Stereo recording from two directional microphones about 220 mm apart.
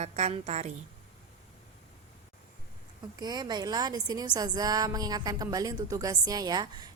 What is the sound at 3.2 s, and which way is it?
A woman's voice, 20° right (ahead or behind).